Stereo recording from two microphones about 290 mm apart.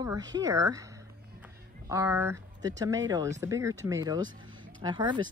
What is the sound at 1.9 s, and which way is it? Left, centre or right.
Speech, centre.